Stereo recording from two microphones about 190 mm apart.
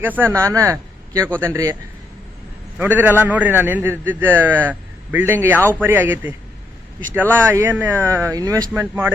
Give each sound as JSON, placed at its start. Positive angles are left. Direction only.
{"t": 0.0, "sound": "a man's voice", "side_deg": -10}
{"t": 2.7, "sound": "a man's voice", "side_deg": -10}